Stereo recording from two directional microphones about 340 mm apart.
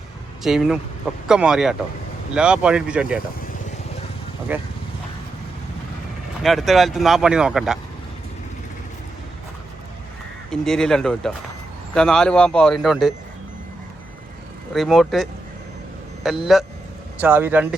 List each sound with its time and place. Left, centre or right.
0.4 s speech: centre
4.5 s speech: centre
6.4 s speech: centre
10.5 s speech: centre
14.7 s speech: centre